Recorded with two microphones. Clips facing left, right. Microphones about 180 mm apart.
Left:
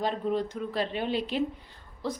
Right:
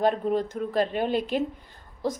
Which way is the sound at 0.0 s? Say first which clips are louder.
Right 5 dB; 50° right (ahead or behind).